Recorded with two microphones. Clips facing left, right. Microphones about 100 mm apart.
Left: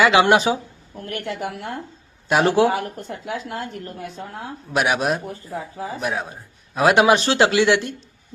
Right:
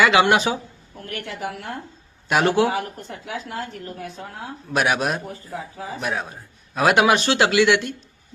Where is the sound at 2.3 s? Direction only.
30° left (ahead or behind).